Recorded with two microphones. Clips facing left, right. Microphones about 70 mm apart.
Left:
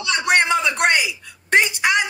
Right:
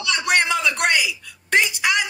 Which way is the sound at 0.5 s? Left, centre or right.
Left.